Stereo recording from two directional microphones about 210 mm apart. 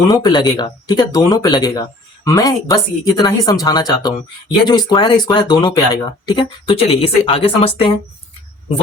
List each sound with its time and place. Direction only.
0.1 s speech: 20° left (ahead or behind)